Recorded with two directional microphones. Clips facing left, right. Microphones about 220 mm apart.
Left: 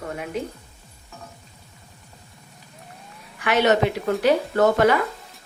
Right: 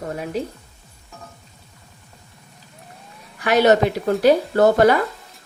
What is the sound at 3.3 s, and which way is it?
Speech, 40° right (ahead or behind).